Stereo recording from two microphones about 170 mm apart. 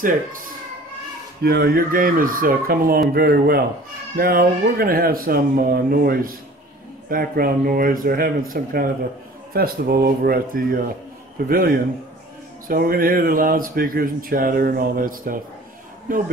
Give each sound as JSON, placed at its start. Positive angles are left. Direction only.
{"t": 1.4, "sound": "speech", "side_deg": -65}